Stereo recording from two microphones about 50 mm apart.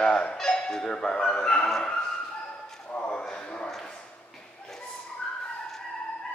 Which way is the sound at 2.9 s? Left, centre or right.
Left.